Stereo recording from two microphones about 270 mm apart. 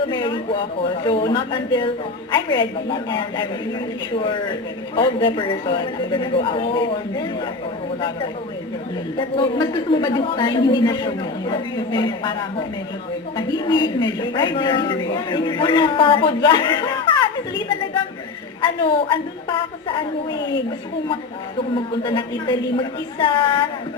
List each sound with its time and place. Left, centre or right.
0.1 s a man's voice: centre
9.1 s a man's voice: centre
18.6 s a man's voice: centre
20.4 s speech: left
22.0 s a man's voice: centre